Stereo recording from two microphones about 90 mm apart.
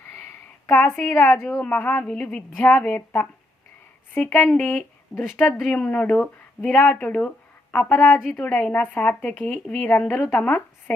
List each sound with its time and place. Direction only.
0.2 s a sound: 30° left (ahead or behind)
1.6 s a woman's voice: 20° left (ahead or behind)
4.1 s a woman's voice: 20° left (ahead or behind)
5.1 s speech: 30° left (ahead or behind)
5.7 s a woman's voice: 15° left (ahead or behind)